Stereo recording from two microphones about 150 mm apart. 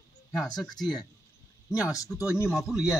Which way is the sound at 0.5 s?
25° left (ahead or behind).